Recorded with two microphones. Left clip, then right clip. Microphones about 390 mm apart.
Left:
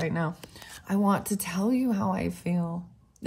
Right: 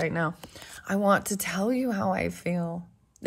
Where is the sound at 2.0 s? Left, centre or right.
Right.